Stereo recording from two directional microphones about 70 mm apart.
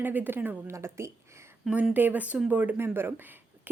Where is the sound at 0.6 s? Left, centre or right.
Right.